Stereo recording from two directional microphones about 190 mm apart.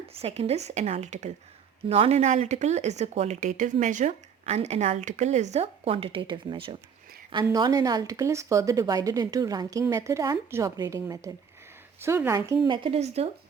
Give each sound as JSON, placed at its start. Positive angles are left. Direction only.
{"t": 0.1, "sound": "speech", "side_deg": -30}
{"t": 12.6, "sound": "speech", "side_deg": -25}